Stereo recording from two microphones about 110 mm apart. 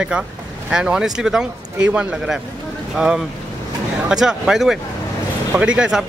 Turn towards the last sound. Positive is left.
turn(degrees=-5)  # may be behind; listen again after turning